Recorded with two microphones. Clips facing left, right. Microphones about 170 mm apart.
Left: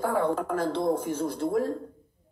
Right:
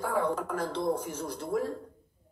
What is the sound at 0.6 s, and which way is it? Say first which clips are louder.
Speech: left 4 dB; 30° left (ahead or behind).